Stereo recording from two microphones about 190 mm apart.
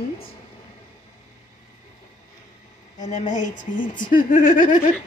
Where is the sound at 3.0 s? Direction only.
40° left (ahead or behind).